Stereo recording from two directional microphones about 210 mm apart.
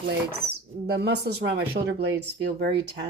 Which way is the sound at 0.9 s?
50° right (ahead or behind).